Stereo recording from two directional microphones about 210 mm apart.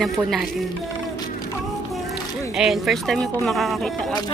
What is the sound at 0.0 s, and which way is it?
Speech, centre (ahead or behind).